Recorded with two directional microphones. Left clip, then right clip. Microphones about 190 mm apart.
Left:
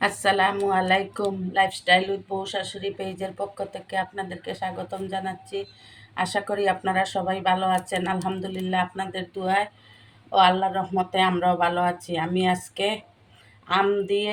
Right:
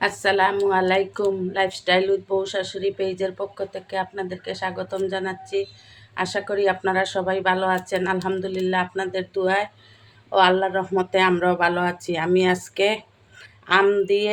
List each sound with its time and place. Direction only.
0.0 s a woman's voice: 10° right (ahead or behind); by 14.0 s 30° right (ahead or behind)